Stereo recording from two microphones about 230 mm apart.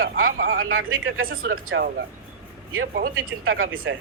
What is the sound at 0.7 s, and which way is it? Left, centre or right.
Speech, right.